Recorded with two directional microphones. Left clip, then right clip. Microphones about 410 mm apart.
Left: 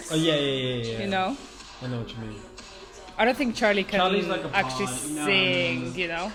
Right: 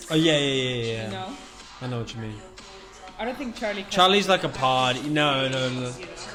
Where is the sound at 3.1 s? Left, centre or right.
Right.